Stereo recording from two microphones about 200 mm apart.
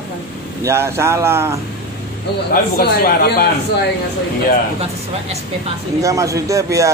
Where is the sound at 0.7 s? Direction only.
10° right (ahead or behind).